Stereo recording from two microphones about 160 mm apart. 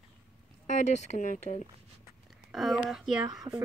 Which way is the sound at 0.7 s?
50° left (ahead or behind).